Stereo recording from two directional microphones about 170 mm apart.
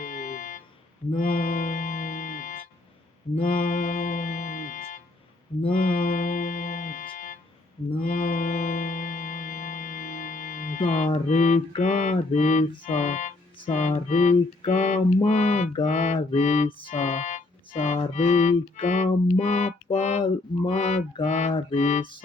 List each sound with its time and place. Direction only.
0.0 s music: 50° left (ahead or behind)
15.9 s mantra: 45° left (ahead or behind)
16.6 s music: 30° left (ahead or behind)
16.9 s music: 45° left (ahead or behind)
20.7 s a sound: 40° left (ahead or behind)
21.2 s music: 40° left (ahead or behind)